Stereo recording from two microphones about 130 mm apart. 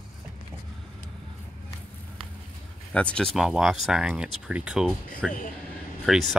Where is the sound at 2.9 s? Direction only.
10° left (ahead or behind).